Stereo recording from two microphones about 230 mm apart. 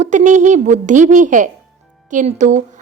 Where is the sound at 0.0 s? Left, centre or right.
Right.